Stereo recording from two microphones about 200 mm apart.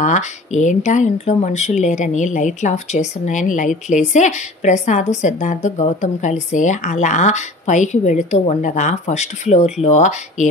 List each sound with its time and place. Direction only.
0.0 s speech: 35° left (ahead or behind)